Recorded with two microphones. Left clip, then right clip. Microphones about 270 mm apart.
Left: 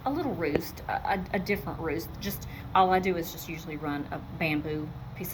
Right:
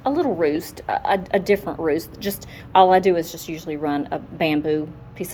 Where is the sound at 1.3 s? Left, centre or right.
Centre.